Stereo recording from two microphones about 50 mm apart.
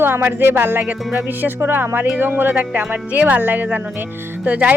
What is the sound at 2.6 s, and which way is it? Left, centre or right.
Speech, right.